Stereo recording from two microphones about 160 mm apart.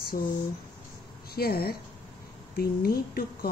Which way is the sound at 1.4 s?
70° left (ahead or behind).